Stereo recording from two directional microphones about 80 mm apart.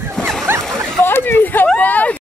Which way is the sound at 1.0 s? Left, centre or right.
Left.